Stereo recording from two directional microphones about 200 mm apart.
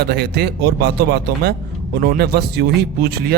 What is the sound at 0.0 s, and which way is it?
A man's voice, 50° right (ahead or behind).